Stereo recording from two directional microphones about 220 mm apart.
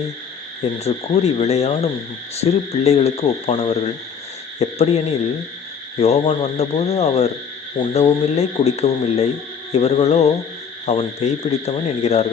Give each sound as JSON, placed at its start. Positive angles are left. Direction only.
{"t": 0.6, "sound": "speech", "side_deg": 30}